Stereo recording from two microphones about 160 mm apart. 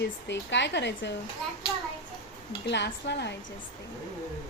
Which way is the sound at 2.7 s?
90° left.